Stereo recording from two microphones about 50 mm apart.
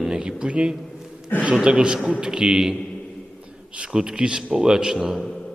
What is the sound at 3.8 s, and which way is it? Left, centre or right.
A man's voice, centre.